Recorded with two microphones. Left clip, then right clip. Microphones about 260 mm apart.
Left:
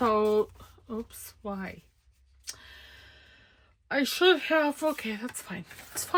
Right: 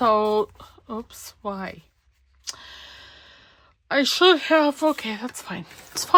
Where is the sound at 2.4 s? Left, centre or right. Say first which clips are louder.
Right 8 dB; centre.